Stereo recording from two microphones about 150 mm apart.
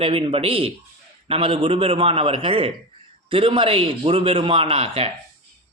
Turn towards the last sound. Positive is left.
turn(degrees=-40)  # may be behind; listen again after turning